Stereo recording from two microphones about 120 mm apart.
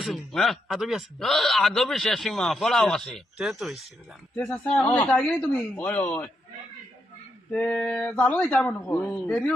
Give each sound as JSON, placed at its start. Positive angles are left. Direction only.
{"t": 0.0, "sound": "a man's voice", "side_deg": 0}
{"t": 4.4, "sound": "speech", "side_deg": 10}
{"t": 7.5, "sound": "speech", "side_deg": 10}